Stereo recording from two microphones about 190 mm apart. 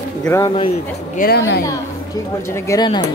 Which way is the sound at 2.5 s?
15° left (ahead or behind).